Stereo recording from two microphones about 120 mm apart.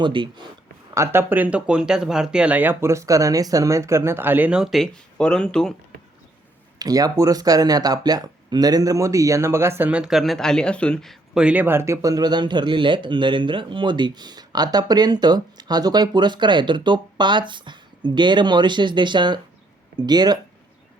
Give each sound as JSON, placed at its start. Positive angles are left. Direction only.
{"t": 0.0, "sound": "speech", "side_deg": -40}
{"t": 0.9, "sound": "speech", "side_deg": -20}
{"t": 6.7, "sound": "speech", "side_deg": -30}
{"t": 11.4, "sound": "speech", "side_deg": -15}